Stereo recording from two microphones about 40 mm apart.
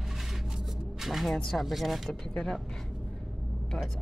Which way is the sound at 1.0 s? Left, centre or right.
Centre.